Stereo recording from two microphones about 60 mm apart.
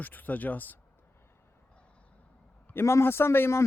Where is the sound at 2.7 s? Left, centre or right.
Left.